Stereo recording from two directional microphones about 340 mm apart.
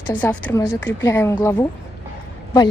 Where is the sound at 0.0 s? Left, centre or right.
Centre.